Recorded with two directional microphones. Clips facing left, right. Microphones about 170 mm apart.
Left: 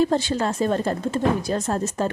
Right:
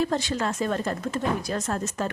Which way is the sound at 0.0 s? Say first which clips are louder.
Left 5 dB; 30° left (ahead or behind).